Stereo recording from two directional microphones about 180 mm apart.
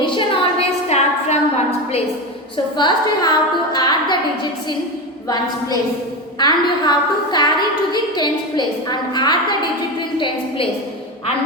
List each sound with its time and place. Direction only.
0.0 s a sound: 30° left (ahead or behind)
2.7 s a woman's voice: 25° left (ahead or behind)
6.4 s a woman's voice: 25° left (ahead or behind)